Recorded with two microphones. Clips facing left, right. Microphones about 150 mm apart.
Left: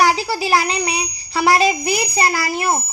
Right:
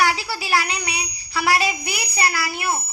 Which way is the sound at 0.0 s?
40° left (ahead or behind).